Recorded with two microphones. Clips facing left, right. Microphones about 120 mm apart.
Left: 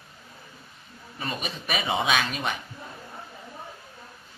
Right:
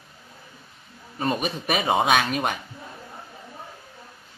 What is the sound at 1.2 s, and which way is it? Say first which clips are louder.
Speech: right 8 dB; 50° right (ahead or behind).